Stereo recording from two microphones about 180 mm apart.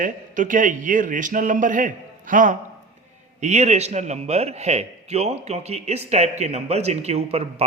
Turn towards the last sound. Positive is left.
turn(degrees=-35)  # may be behind; listen again after turning